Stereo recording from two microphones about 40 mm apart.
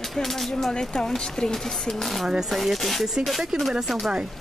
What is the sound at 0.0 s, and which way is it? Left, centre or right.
Speech, centre.